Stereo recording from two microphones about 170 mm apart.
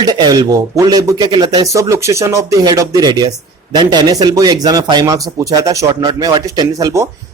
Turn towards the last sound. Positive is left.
turn(degrees=-20)  # may be behind; listen again after turning